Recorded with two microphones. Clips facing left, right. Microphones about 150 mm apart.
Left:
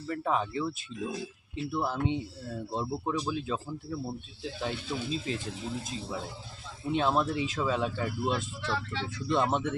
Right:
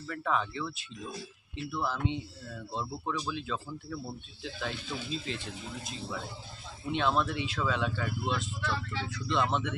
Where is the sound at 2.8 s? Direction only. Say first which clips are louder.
Left 3 dB; 20° left (ahead or behind).